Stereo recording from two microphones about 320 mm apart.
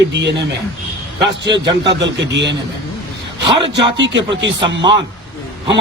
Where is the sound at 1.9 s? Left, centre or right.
Right.